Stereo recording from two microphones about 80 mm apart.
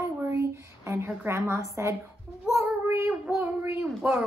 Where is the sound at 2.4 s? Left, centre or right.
Right.